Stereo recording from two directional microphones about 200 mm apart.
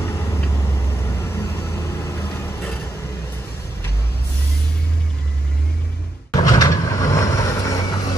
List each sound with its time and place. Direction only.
0.0 s vehicle: 15° left (ahead or behind)
6.3 s vehicle: 15° left (ahead or behind)